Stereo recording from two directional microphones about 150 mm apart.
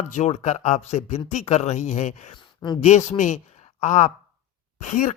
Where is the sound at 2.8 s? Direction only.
50° left (ahead or behind).